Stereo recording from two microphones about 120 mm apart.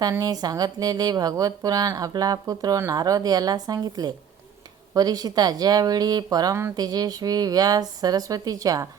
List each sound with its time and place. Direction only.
0.0 s speech: 30° right (ahead or behind)